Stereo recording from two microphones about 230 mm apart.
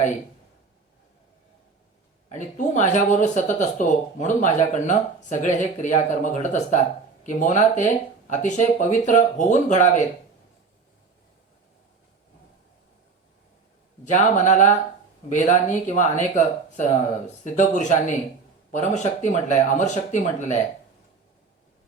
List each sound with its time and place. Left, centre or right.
2.3 s speech: left
14.0 s speech: left